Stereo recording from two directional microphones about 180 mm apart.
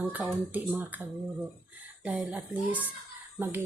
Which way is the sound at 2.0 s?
5° right (ahead or behind).